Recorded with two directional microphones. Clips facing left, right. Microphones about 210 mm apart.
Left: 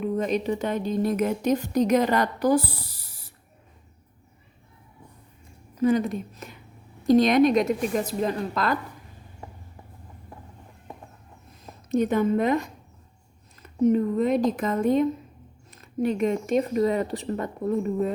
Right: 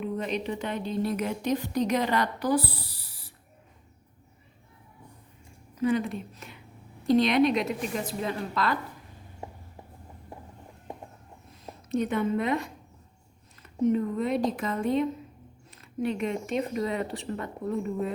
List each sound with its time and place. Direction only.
0.0 s a woman's voice: 45° left (ahead or behind)
5.8 s a woman's voice: 40° left (ahead or behind)
11.9 s a woman's voice: 40° left (ahead or behind)